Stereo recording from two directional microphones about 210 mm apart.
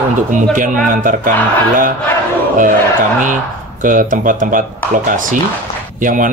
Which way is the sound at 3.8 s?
40° right (ahead or behind).